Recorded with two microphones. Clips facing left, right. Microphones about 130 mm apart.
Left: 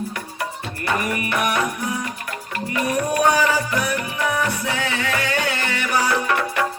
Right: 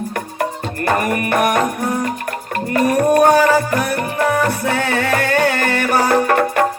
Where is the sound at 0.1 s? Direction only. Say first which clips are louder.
Right 7 dB; 50° right (ahead or behind).